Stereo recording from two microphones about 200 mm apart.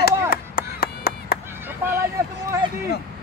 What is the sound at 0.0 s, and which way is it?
Chop, 50° left (ahead or behind).